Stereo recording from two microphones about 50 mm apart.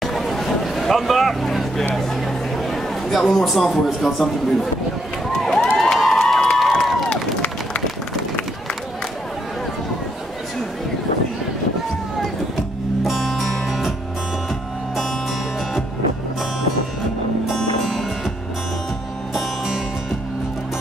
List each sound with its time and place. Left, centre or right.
0.0 s vehicle: centre
2.5 s a man's voice: centre
5.3 s run: centre
5.8 s cheering: centre
6.4 s crowd: centre
7.1 s run: left
13.0 s music: centre
17.6 s music: centre
19.3 s music: centre